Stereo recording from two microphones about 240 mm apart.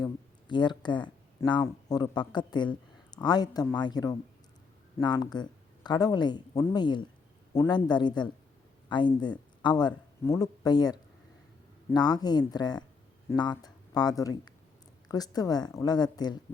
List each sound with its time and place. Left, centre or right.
0.0 s speech: centre